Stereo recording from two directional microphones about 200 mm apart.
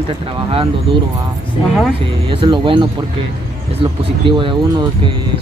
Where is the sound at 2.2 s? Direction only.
25° right (ahead or behind).